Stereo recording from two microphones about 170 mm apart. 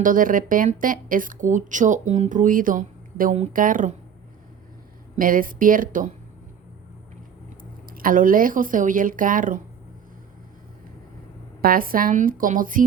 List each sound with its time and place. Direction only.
0.0 s speech: 55° right (ahead or behind)
5.1 s speech: 55° right (ahead or behind)
7.6 s speech: 55° right (ahead or behind)
11.6 s a woman's voice: 55° right (ahead or behind)